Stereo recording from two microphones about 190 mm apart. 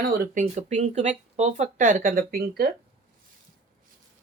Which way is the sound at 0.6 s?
35° right (ahead or behind).